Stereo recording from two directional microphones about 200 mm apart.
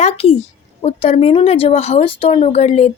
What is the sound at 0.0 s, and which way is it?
A child's voice, 30° left (ahead or behind).